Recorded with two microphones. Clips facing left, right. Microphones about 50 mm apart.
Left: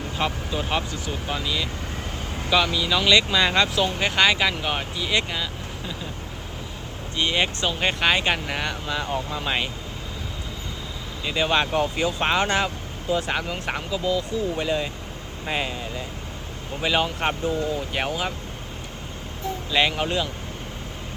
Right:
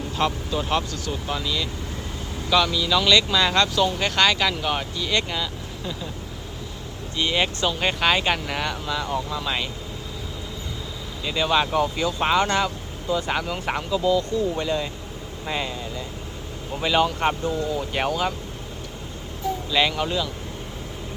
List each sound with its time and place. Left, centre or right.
0.2 s speech: centre
2.7 s speech: centre
7.7 s speech: centre
11.3 s speech: centre
13.2 s speech: centre
19.7 s speech: centre